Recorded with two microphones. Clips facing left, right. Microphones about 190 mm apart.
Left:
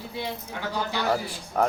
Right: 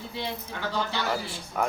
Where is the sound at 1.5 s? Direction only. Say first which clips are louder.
Left 4 dB; 35° left (ahead or behind).